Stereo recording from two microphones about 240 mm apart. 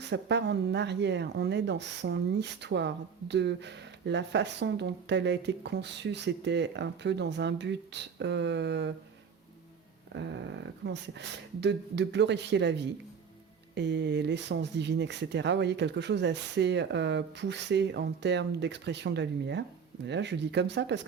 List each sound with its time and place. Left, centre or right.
0.1 s speech: right
10.1 s speech: right